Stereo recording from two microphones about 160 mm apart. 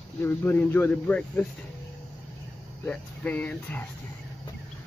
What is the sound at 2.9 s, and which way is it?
Speech, 10° left (ahead or behind).